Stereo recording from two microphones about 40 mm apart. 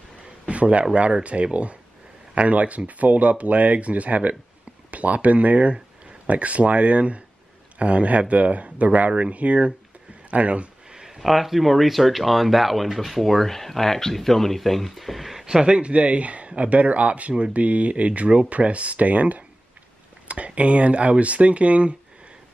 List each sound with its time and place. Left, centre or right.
0.5 s a man's voice: right
10.9 s speech: centre
15.4 s speech: right